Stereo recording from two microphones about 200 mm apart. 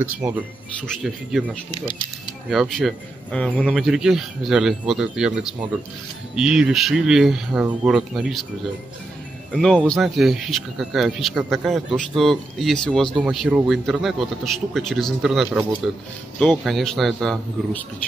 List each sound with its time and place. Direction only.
0.0 s speech: 10° right (ahead or behind)
0.7 s speech: centre (ahead or behind)
1.7 s speech: 25° left (ahead or behind)
2.5 s speech: centre (ahead or behind)
9.5 s speech: 5° left (ahead or behind)